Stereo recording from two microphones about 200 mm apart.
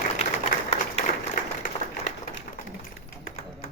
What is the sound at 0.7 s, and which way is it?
Applause, 30° left (ahead or behind).